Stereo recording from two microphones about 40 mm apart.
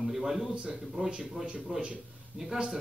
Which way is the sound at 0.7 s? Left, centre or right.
Centre.